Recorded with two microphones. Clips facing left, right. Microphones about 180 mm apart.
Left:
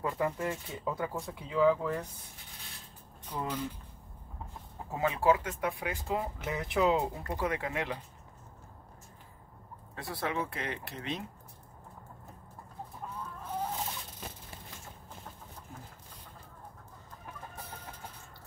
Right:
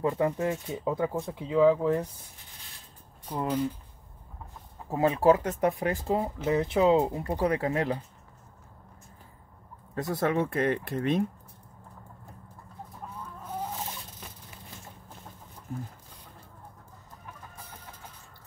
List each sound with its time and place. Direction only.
0.0 s speech: 25° right (ahead or behind)
3.3 s speech: 40° right (ahead or behind)
4.8 s speech: 40° right (ahead or behind); by 7.3 s 20° right (ahead or behind)
7.3 s speech: 35° right (ahead or behind)
9.9 s speech: 45° right (ahead or behind)